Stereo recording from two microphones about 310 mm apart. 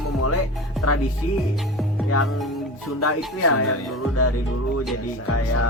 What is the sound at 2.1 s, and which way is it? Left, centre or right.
Music, left.